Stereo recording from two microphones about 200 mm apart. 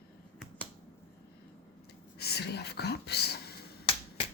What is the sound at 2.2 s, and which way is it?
Speech, 55° left (ahead or behind).